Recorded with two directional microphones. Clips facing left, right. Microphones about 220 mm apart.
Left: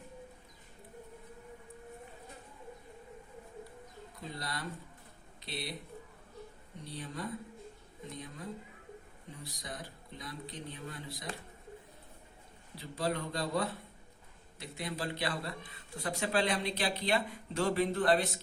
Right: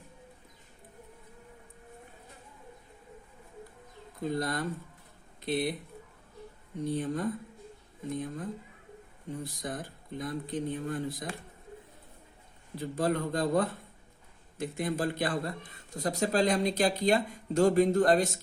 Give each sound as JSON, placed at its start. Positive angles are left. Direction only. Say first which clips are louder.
{"t": 4.2, "sound": "a man's voice", "louder": "right 11 dB", "side_deg": -50}
{"t": 6.8, "sound": "a man's voice", "louder": "right 10 dB", "side_deg": -50}
{"t": 12.7, "sound": "a man's voice", "louder": "right 6 dB", "side_deg": -50}